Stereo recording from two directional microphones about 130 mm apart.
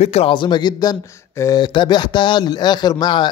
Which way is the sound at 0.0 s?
50° left (ahead or behind).